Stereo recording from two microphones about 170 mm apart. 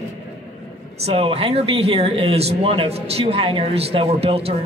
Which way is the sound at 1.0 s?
35° right (ahead or behind).